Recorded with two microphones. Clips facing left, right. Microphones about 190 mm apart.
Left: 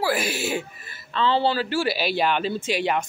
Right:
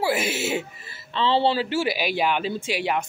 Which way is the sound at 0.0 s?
25° right (ahead or behind).